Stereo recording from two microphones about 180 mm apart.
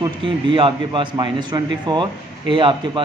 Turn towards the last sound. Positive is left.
turn(degrees=-25)  # may be behind; listen again after turning